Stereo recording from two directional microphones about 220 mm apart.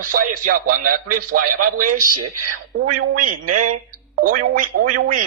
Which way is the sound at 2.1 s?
90° right.